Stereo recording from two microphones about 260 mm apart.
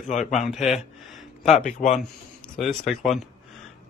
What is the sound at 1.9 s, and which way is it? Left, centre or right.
Speech, centre.